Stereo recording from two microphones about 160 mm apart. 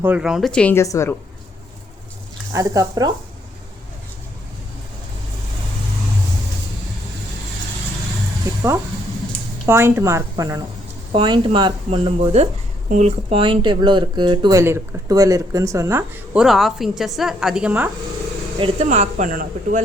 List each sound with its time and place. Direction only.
0.0 s a woman's voice: 5° right (ahead or behind)
0.8 s a woman's voice: 20° left (ahead or behind)
2.5 s speech: 20° right (ahead or behind)
9.6 s a woman's voice: 15° right (ahead or behind)
11.1 s speech: 30° right (ahead or behind)
14.6 s speech: 15° right (ahead or behind)
16.3 s a woman's voice: 5° right (ahead or behind)
18.9 s speech: 50° right (ahead or behind)